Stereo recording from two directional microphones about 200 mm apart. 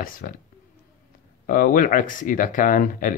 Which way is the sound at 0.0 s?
45° left (ahead or behind).